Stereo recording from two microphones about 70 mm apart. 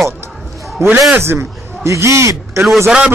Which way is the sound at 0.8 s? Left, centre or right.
Right.